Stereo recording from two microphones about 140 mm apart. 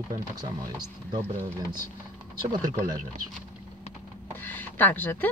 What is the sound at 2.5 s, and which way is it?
Speech, 30° right (ahead or behind).